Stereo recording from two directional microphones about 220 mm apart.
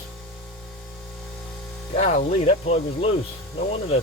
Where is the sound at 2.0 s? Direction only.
30° left (ahead or behind).